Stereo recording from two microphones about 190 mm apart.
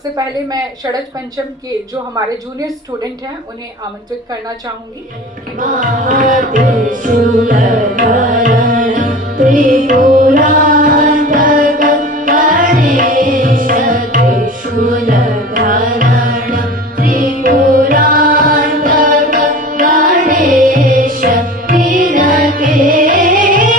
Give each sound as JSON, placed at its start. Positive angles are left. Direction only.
{"t": 6.1, "sound": "music", "side_deg": -45}